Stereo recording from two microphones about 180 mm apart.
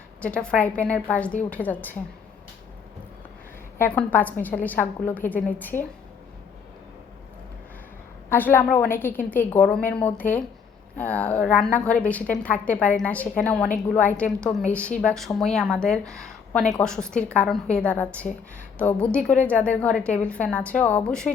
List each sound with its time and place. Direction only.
0.2 s a woman's voice: 5° left (ahead or behind)
3.8 s a woman's voice: 10° left (ahead or behind)
8.3 s a woman's voice: 10° left (ahead or behind)
16.0 s speech: 15° right (ahead or behind)
16.7 s a woman's voice: 5° left (ahead or behind)